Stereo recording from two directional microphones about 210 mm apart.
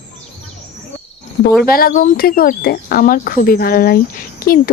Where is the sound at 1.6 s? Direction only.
45° left (ahead or behind).